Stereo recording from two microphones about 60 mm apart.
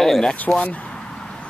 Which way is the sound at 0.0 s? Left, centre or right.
Centre.